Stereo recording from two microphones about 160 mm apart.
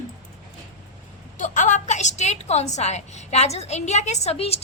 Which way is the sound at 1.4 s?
50° left (ahead or behind).